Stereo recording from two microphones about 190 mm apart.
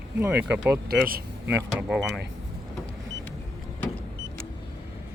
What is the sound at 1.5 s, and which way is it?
Speech, 10° right (ahead or behind).